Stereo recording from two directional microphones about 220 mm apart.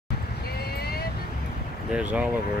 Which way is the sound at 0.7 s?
45° left (ahead or behind).